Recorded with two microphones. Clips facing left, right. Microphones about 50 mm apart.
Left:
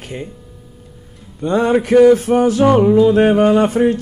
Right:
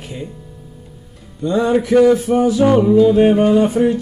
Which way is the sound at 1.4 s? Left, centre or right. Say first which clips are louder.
Left 1 dB; left.